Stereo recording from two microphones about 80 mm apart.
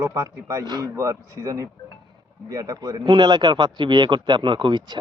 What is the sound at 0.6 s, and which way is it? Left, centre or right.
Speech, right.